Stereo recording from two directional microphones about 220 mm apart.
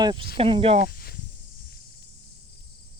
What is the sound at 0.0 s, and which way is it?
Speech, 20° right (ahead or behind).